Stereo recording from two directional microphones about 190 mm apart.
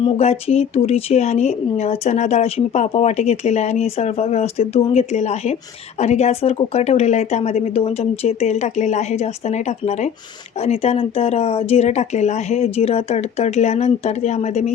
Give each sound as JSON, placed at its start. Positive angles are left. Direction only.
{"t": 0.0, "sound": "speech", "side_deg": 35}